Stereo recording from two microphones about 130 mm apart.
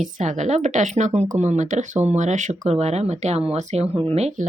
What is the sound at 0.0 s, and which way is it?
Speech, 70° right (ahead or behind).